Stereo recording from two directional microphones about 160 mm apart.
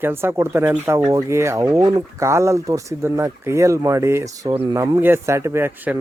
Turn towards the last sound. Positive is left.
turn(degrees=-10)  # may be behind; listen again after turning